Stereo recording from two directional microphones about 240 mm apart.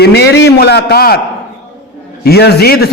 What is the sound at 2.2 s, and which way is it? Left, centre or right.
Speech, left.